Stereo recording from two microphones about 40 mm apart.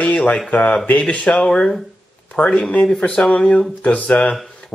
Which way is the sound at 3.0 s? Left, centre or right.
Left.